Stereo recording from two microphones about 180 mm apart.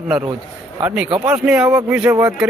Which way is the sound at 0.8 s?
10° right (ahead or behind).